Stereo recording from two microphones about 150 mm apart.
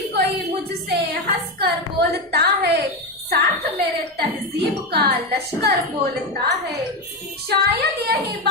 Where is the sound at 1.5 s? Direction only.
90° right.